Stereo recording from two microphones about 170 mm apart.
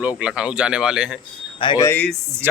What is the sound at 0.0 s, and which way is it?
Speech, 5° right (ahead or behind).